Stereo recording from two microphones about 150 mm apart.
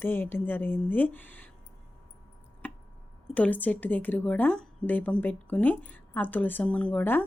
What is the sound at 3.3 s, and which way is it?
A woman's voice, 10° left (ahead or behind).